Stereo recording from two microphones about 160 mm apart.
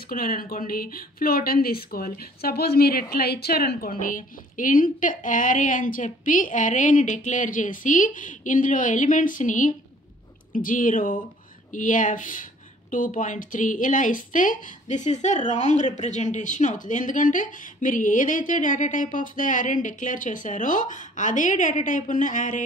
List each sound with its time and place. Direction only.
0.1 s a woman's voice: 65° left (ahead or behind)